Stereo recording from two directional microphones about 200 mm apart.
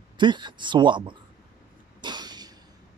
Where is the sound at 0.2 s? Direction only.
20° right (ahead or behind).